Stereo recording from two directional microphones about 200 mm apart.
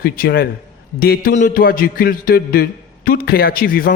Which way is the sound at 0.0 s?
50° left (ahead or behind).